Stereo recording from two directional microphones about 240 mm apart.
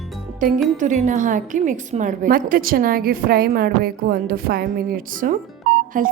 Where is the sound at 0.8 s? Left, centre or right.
Right.